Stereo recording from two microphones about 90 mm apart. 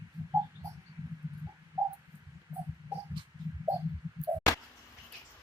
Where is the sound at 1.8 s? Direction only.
30° right (ahead or behind).